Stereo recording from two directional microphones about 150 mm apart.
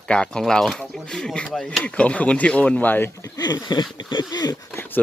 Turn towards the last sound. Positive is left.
turn(degrees=25)  # may be behind; listen again after turning